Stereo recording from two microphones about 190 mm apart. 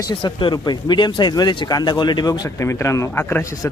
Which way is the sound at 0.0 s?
20° left (ahead or behind).